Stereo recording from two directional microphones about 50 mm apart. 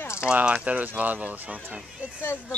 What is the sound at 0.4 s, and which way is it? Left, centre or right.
Speech, right.